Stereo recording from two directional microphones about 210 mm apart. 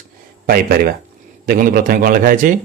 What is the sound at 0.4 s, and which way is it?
Speech, 45° right (ahead or behind).